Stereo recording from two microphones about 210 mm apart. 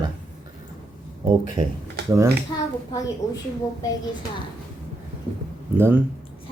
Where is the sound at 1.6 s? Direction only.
20° right (ahead or behind).